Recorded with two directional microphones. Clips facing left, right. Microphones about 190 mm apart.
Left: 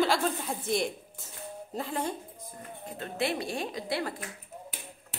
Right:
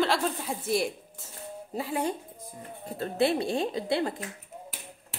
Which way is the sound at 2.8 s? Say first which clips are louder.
Right 6 dB; 35° right (ahead or behind).